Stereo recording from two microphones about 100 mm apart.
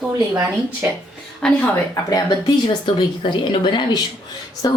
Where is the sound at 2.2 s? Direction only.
55° left (ahead or behind).